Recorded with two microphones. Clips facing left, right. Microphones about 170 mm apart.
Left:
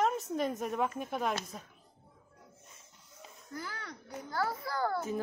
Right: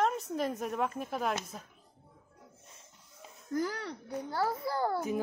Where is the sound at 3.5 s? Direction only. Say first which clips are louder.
Right 10 dB; 40° right (ahead or behind); by 5.2 s 20° right (ahead or behind).